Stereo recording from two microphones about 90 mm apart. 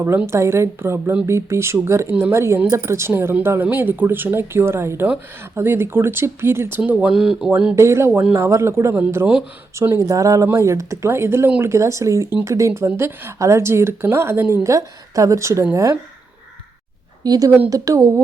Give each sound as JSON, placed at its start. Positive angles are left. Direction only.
{"t": 0.3, "sound": "a woman's voice", "side_deg": -30}
{"t": 7.8, "sound": "a woman's voice", "side_deg": -30}
{"t": 9.0, "sound": "speech", "side_deg": -20}
{"t": 9.7, "sound": "a woman's voice", "side_deg": -30}
{"t": 17.2, "sound": "a woman's voice", "side_deg": -45}